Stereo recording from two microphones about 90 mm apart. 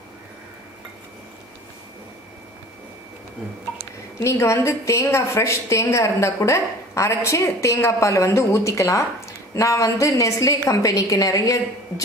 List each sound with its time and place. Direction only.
4.2 s a woman's voice: 30° left (ahead or behind)